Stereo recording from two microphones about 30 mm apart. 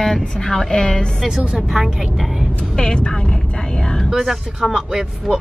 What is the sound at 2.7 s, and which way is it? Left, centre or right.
Speech, left.